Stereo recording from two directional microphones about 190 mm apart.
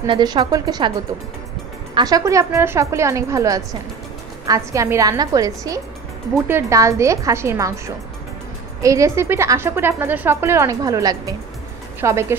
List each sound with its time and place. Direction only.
0.0 s speech: 20° right (ahead or behind)
2.0 s speech: 20° right (ahead or behind)